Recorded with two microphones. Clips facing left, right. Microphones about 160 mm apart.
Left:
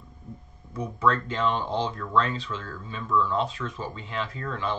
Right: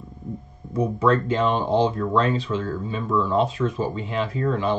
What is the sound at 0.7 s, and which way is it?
Speech, 25° right (ahead or behind).